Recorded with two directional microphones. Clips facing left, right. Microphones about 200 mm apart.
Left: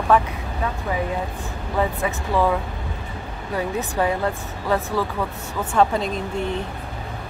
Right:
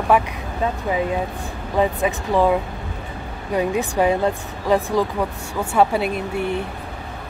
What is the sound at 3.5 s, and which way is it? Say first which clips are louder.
Speech: right 4 dB; 15° right (ahead or behind).